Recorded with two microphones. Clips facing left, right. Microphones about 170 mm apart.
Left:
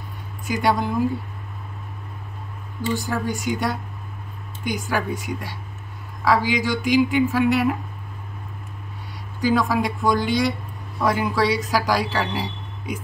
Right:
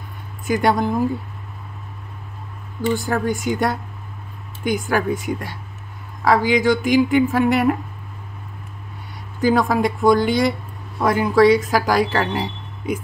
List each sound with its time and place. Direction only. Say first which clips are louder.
0.5 s speech: right 3 dB; 50° right (ahead or behind)
2.9 s speech: right 4 dB; 50° right (ahead or behind)
9.4 s speech: right 3 dB; 50° right (ahead or behind)